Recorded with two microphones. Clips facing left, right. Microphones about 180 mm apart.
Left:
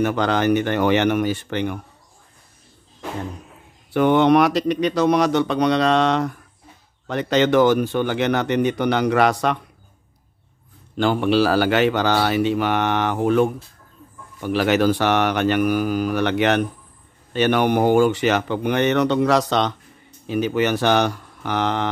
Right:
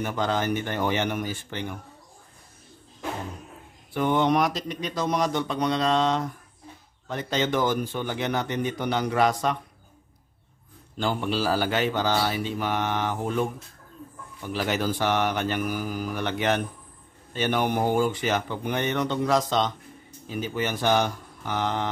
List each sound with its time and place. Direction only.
0.0 s a man's voice: 75° left (ahead or behind)
3.9 s a man's voice: 75° left (ahead or behind)
11.0 s a man's voice: 75° left (ahead or behind)